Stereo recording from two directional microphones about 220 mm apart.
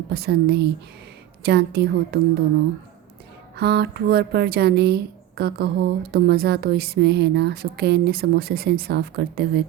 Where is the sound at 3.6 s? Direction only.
45° right (ahead or behind).